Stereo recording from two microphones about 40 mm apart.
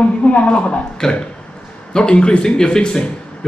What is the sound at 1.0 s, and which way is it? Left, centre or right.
A man's voice, centre.